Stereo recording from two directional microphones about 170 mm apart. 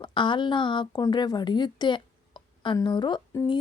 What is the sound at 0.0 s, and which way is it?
Speech, 30° left (ahead or behind).